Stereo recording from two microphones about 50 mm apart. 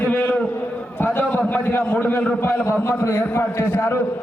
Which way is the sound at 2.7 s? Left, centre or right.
Left.